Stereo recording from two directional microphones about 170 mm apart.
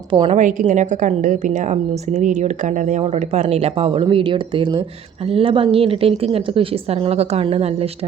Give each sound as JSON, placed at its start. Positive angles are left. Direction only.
{"t": 0.1, "sound": "a woman's voice", "side_deg": -30}
{"t": 0.3, "sound": "a woman's voice", "side_deg": -45}